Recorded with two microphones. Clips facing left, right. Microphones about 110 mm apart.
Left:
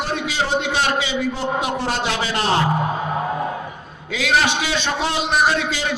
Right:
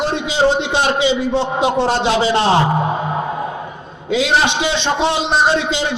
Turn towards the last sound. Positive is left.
turn(degrees=-25)  # may be behind; listen again after turning